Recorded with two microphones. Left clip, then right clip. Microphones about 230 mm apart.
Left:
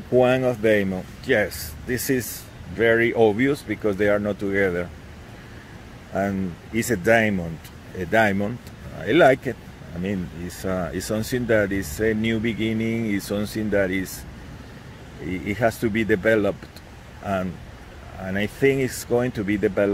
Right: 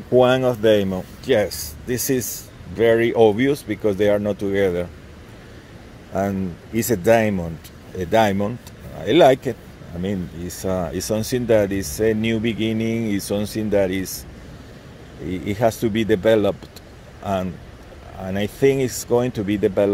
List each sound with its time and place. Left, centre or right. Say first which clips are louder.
0.2 s speech: right 3 dB; right
6.1 s speech: right 2 dB; right
10.6 s speech: right 3 dB; right
15.4 s speech: right 3 dB; right
18.3 s speech: right 2 dB; right